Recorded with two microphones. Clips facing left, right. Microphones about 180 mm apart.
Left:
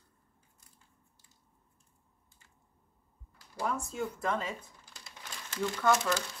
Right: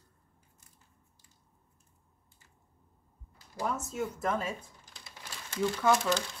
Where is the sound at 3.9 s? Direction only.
5° right (ahead or behind).